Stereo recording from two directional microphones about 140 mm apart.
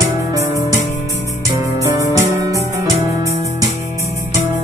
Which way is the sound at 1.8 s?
25° right (ahead or behind).